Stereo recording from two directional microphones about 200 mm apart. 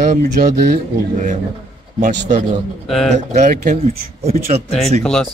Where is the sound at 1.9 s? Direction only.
40° right (ahead or behind).